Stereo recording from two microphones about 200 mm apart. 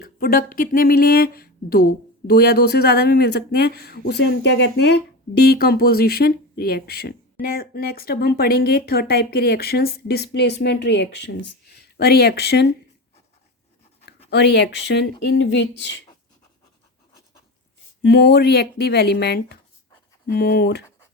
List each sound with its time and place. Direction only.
0.0 s speech: 50° left (ahead or behind)
14.3 s speech: 55° left (ahead or behind)
18.0 s speech: 55° left (ahead or behind)